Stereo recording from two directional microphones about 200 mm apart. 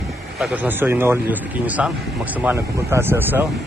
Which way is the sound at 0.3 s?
5° right (ahead or behind).